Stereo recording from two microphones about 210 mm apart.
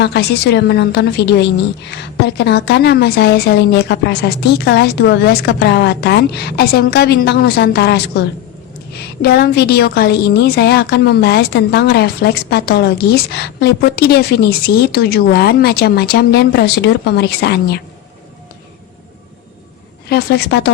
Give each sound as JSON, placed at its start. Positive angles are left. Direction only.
{"t": 0.0, "sound": "a woman's voice", "side_deg": 55}
{"t": 20.1, "sound": "a woman's voice", "side_deg": 50}